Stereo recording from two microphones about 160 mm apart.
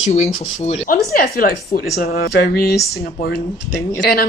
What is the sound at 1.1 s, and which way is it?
Speech, 70° left (ahead or behind).